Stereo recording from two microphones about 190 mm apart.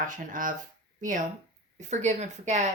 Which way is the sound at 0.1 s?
45° right (ahead or behind).